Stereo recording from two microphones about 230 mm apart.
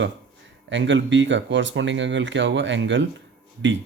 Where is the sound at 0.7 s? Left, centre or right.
Right.